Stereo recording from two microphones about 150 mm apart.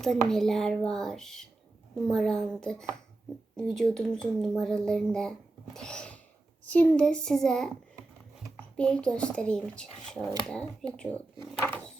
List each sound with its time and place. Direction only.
0.0 s speech: centre (ahead or behind)
5.7 s a sound: 5° left (ahead or behind)
6.7 s speech: 10° left (ahead or behind)
8.7 s speech: 5° left (ahead or behind)